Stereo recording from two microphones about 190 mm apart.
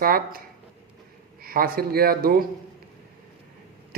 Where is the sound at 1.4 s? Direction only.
50° right (ahead or behind).